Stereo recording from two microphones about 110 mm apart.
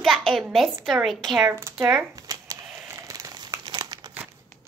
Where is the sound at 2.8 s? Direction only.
25° right (ahead or behind).